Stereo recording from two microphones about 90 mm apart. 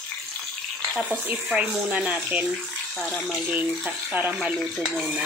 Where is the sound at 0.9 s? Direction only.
10° right (ahead or behind).